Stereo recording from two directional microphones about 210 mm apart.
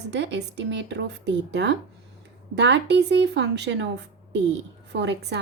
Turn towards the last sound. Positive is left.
turn(degrees=-55)  # may be behind; listen again after turning